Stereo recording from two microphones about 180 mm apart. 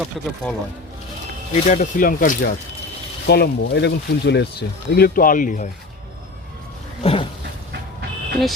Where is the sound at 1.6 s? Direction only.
45° left (ahead or behind).